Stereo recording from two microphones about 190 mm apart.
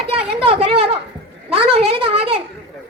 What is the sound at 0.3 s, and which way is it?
Speech, 30° right (ahead or behind).